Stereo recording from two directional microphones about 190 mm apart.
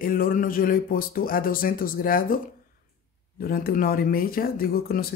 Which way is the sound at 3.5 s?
50° left (ahead or behind).